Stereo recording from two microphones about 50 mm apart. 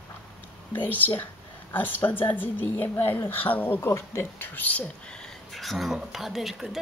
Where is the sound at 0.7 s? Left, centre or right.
Left.